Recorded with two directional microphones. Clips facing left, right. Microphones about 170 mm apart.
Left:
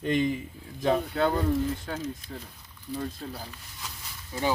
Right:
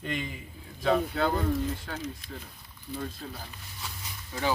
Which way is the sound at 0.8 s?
20° left (ahead or behind).